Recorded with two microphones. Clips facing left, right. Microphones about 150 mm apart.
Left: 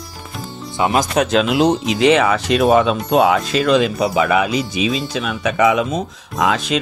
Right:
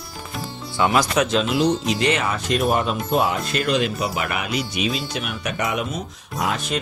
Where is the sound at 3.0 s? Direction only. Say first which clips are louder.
Left 6 dB; 75° left (ahead or behind).